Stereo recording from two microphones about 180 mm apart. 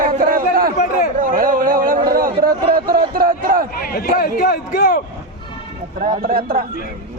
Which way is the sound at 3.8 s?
55° left (ahead or behind).